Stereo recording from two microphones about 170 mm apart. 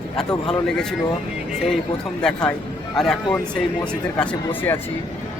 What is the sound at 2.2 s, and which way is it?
Speech, 5° left (ahead or behind).